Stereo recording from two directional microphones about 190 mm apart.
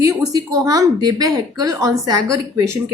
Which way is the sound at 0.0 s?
20° right (ahead or behind).